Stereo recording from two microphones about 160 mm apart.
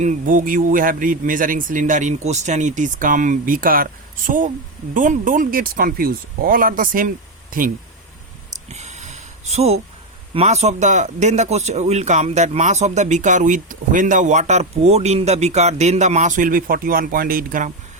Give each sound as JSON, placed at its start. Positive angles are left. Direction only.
{"t": 0.0, "sound": "speech", "side_deg": -55}
{"t": 8.7, "sound": "a sound", "side_deg": -45}
{"t": 10.3, "sound": "speech", "side_deg": -45}